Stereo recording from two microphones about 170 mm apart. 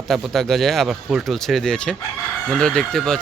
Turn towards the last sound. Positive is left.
turn(degrees=5)  # may be behind; listen again after turning